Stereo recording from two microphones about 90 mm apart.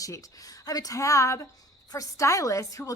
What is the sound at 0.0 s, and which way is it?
A woman's voice, 40° left (ahead or behind).